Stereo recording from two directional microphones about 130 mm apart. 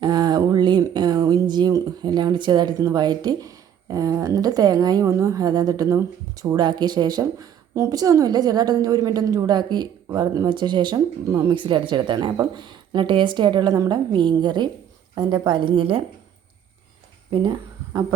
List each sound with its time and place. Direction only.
0.0 s speech: 35° right (ahead or behind)